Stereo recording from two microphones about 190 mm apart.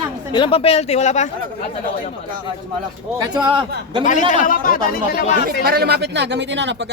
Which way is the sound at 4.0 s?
40° left (ahead or behind).